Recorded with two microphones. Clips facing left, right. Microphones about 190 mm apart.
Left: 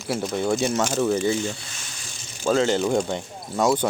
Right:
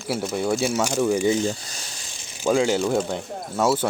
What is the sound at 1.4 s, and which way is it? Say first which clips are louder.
Speech: right 4 dB; 35° right (ahead or behind).